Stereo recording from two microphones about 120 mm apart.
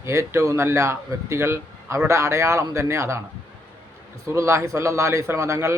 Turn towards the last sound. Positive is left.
turn(degrees=-25)  # may be behind; listen again after turning